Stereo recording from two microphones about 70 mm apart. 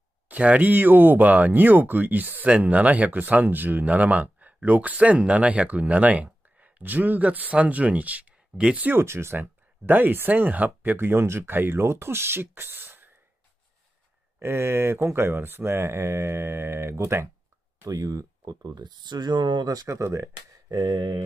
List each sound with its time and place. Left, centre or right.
0.3 s speech: right
9.0 s speech: right
14.4 s speech: right
17.8 s speech: right
20.0 s speech: right
20.7 s speech: right